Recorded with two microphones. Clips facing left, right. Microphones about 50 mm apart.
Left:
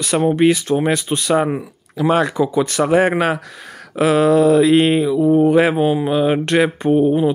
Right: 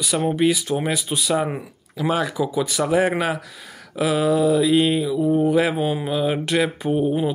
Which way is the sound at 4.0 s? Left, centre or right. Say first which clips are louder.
Left 6 dB; left.